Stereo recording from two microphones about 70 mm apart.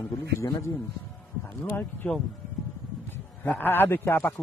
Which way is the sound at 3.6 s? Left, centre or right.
Left.